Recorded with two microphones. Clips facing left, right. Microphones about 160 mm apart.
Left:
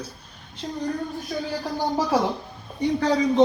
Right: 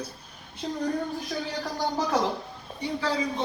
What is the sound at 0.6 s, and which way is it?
Speech, centre (ahead or behind).